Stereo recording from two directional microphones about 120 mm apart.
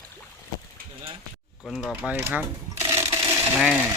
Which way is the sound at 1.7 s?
5° right (ahead or behind).